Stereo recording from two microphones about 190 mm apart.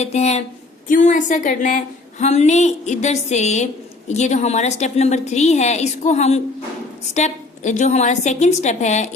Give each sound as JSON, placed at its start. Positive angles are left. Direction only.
{"t": 0.0, "sound": "a woman's voice", "side_deg": 35}